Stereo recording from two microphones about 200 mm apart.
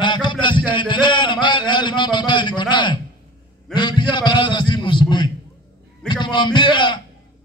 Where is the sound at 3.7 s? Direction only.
25° left (ahead or behind).